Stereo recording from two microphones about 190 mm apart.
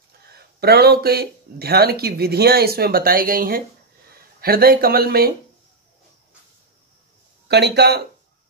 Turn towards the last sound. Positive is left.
turn(degrees=-60)  # may be behind; listen again after turning